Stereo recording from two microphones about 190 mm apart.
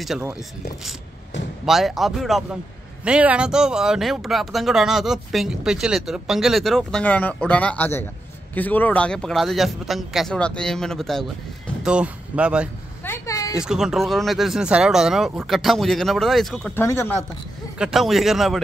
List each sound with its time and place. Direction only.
0.0 s speech: 5° right (ahead or behind)
1.7 s speech: centre (ahead or behind)
13.0 s a sound: 15° left (ahead or behind)
13.6 s speech: 5° right (ahead or behind)
16.8 s speech: 15° left (ahead or behind)
17.7 s speech: 5° right (ahead or behind)